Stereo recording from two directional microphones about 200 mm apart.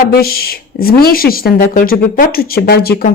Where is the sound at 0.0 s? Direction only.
50° left (ahead or behind).